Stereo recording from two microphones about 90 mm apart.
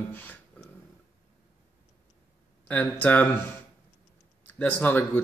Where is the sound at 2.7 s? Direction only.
20° left (ahead or behind).